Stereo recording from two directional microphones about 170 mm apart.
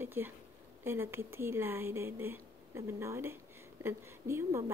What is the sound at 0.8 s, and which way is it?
A woman's voice, 15° right (ahead or behind).